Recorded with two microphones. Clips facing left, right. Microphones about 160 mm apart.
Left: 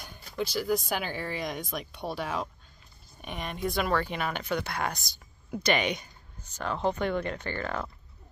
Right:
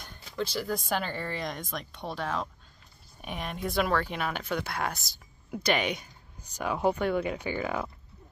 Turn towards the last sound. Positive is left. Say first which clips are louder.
# right 2 dB
turn(degrees=-10)  # may be behind; listen again after turning